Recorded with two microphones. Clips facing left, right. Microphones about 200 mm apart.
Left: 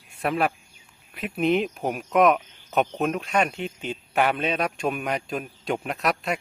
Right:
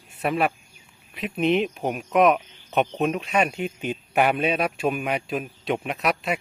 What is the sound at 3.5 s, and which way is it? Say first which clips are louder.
A man's voice: right 3 dB; 15° right (ahead or behind).